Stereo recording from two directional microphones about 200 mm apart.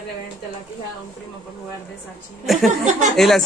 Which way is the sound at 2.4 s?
Centre (ahead or behind).